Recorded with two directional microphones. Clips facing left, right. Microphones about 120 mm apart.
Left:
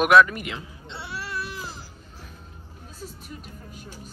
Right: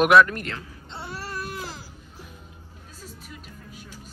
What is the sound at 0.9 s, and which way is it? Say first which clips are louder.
Baby cry: left 1 dB; 45° right (ahead or behind).